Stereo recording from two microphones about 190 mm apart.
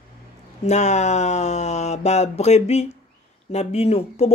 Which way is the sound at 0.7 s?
35° left (ahead or behind).